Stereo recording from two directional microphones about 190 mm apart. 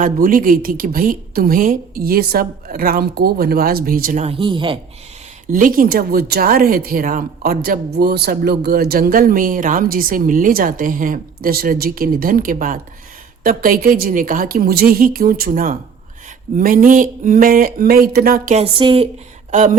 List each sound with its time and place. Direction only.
0.0 s speech: 45° right (ahead or behind)
4.3 s speech: 25° right (ahead or behind)
5.5 s speech: 45° right (ahead or behind)
18.5 s speech: 30° right (ahead or behind)
19.5 s speech: 40° right (ahead or behind)